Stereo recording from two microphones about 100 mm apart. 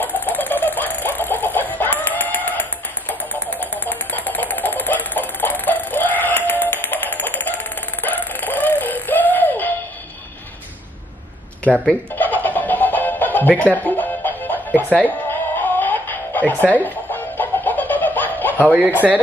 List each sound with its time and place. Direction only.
0.0 s a sound: 20° left (ahead or behind)
11.7 s speech: 10° left (ahead or behind)
12.2 s music: 15° left (ahead or behind)
18.7 s speech: 10° right (ahead or behind)